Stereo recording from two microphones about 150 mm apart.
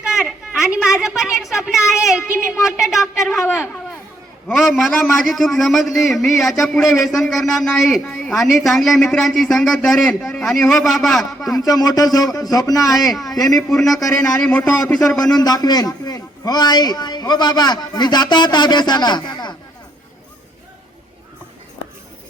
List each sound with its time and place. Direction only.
0.0 s a sound: 5° right (ahead or behind)
4.4 s speech: centre (ahead or behind)
11.5 s a man's voice: 25° left (ahead or behind)
13.0 s speech: centre (ahead or behind)
15.4 s a man's voice: 25° left (ahead or behind)